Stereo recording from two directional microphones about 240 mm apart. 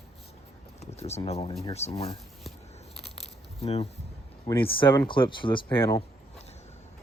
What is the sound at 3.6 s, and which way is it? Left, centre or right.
Speech, left.